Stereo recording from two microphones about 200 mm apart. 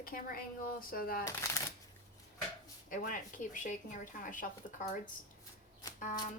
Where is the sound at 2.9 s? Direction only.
40° left (ahead or behind).